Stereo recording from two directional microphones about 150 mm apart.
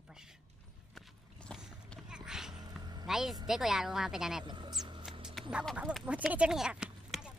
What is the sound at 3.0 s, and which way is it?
Speech, 5° right (ahead or behind).